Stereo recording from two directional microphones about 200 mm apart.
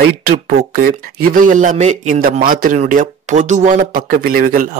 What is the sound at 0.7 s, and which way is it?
Speech, 45° right (ahead or behind).